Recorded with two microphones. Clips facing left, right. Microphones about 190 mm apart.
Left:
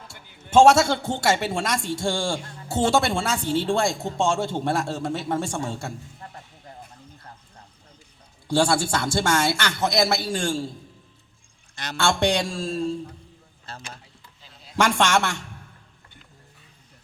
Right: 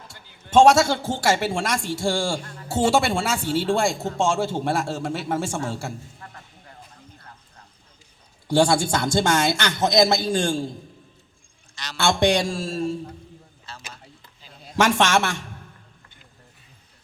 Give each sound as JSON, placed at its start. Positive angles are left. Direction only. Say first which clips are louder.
{"t": 0.5, "sound": "a man's voice", "louder": "even", "side_deg": 5}
{"t": 8.4, "sound": "a man's voice", "louder": "right 2 dB", "side_deg": -15}
{"t": 11.7, "sound": "a man's voice", "louder": "left 3 dB", "side_deg": 55}
{"t": 12.3, "sound": "a man's voice", "louder": "right 2 dB", "side_deg": -10}
{"t": 13.7, "sound": "a sound", "louder": "left 2 dB", "side_deg": 55}
{"t": 14.8, "sound": "a man's voice", "louder": "right 1 dB", "side_deg": -10}